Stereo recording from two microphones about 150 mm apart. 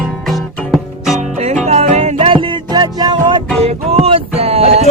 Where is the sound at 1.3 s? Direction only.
50° right (ahead or behind); by 3.4 s 30° right (ahead or behind).